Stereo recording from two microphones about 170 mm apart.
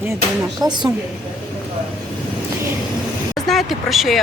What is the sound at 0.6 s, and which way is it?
Speech, 25° right (ahead or behind).